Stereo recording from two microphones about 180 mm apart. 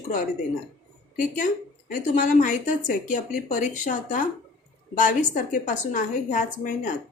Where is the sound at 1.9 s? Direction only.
45° left (ahead or behind).